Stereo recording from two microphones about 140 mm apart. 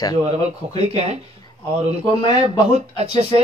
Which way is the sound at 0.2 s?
50° right (ahead or behind).